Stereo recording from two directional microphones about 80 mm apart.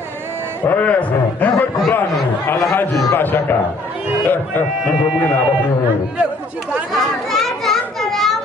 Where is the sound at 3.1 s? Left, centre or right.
Left.